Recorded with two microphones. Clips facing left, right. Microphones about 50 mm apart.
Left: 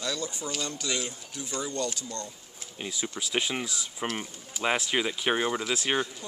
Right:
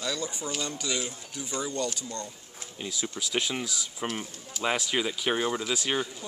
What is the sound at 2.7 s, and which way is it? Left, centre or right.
Speech, centre.